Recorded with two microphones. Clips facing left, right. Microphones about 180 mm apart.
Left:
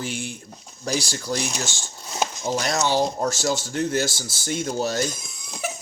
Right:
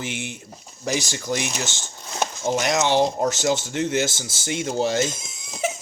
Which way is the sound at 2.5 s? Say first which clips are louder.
Right 3 dB; 20° right (ahead or behind).